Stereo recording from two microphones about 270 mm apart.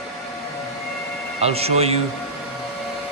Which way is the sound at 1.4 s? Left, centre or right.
Right.